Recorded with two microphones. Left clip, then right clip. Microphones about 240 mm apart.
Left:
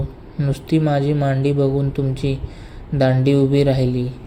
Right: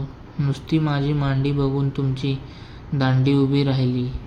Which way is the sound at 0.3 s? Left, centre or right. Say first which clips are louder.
Left 4 dB; centre.